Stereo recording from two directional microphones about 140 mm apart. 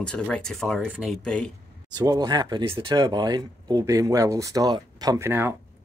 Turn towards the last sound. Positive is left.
turn(degrees=-15)  # may be behind; listen again after turning